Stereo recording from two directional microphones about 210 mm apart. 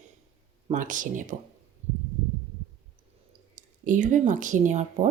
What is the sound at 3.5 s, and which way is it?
Speech, 35° right (ahead or behind).